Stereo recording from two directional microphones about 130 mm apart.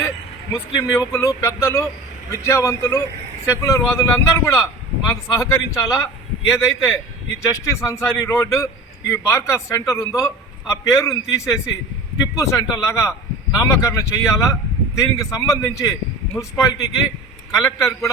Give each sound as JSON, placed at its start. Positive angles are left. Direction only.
{"t": 0.5, "sound": "a man's voice", "side_deg": 20}